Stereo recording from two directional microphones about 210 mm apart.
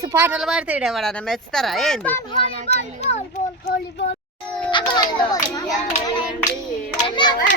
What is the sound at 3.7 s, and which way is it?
Speech, 50° left (ahead or behind).